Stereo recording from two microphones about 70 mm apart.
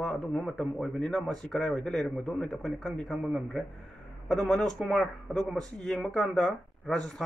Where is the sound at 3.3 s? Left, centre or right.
Centre.